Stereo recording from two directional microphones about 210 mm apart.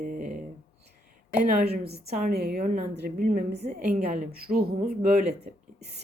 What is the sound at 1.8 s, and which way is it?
Speech, 50° right (ahead or behind).